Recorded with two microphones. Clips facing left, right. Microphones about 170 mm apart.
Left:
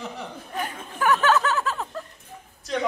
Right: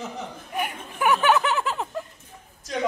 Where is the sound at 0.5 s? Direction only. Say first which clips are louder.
Right 2 dB; 15° right (ahead or behind).